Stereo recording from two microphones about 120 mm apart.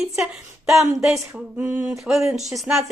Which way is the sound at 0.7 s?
Centre (ahead or behind).